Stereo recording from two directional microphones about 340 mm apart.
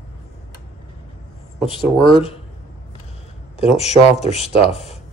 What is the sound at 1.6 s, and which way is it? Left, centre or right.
Speech, centre.